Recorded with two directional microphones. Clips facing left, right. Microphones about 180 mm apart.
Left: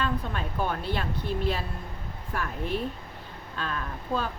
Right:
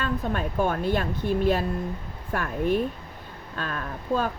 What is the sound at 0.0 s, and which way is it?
Speech, 50° right (ahead or behind).